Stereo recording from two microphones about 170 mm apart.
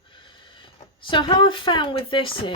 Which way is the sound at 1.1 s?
30° left (ahead or behind).